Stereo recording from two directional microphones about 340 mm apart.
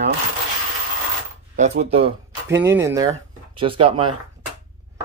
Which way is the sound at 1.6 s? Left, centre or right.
Centre.